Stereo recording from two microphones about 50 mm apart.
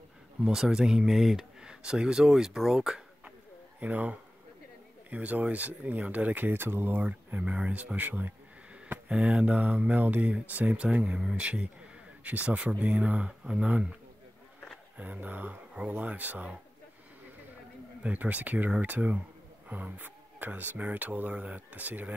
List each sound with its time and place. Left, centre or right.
0.4 s speech: centre
3.8 s speech: right
7.3 s speech: right
9.1 s speech: right
15.0 s speech: right
18.0 s speech: right